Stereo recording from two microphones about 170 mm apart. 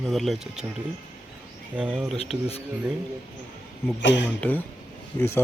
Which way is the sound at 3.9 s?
90° left.